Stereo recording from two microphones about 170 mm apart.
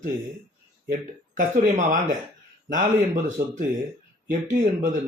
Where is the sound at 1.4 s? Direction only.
50° right (ahead or behind).